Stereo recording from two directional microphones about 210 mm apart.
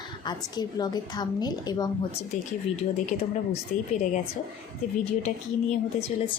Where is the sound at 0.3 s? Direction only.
20° left (ahead or behind).